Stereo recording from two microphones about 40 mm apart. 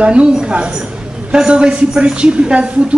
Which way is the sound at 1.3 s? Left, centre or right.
Right.